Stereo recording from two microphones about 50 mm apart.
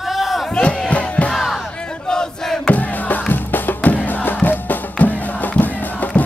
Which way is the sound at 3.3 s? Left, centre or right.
Left.